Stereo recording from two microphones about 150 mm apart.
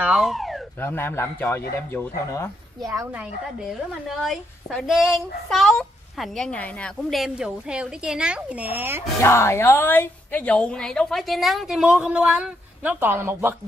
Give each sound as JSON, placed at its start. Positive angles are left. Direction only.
{"t": 0.0, "sound": "speech", "side_deg": 0}
{"t": 0.7, "sound": "a man's voice", "side_deg": 15}
{"t": 2.8, "sound": "a woman's voice", "side_deg": -20}
{"t": 3.2, "sound": "a woman's voice", "side_deg": 0}
{"t": 9.2, "sound": "a woman's voice", "side_deg": 20}